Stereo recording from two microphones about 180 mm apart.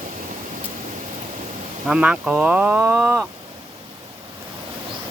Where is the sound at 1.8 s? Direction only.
5° right (ahead or behind).